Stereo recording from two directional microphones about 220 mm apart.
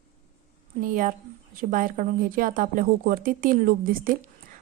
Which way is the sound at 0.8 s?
40° right (ahead or behind).